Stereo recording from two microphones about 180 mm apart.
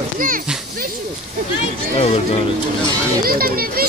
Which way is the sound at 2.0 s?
35° left (ahead or behind).